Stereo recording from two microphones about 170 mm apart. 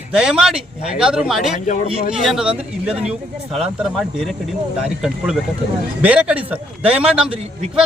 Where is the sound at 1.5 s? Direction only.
45° left (ahead or behind).